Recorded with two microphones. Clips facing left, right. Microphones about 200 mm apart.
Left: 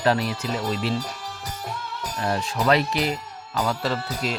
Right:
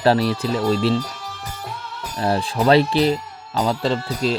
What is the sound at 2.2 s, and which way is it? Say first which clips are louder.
Speech: right 5 dB; 30° right (ahead or behind).